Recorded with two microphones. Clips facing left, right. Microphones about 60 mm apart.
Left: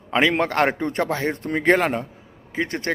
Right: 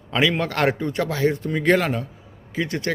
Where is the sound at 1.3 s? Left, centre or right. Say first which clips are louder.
Left 1 dB; left.